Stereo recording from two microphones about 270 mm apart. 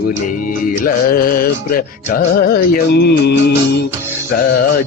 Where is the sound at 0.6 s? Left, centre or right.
Left.